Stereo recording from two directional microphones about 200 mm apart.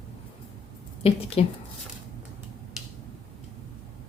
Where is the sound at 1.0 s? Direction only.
30° left (ahead or behind).